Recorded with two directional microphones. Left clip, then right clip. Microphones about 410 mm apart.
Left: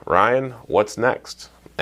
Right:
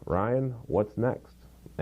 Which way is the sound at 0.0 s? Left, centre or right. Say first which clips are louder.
Left 11 dB; centre.